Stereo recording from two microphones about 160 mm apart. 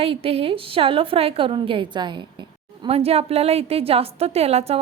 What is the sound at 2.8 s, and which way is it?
A woman's voice, 40° right (ahead or behind).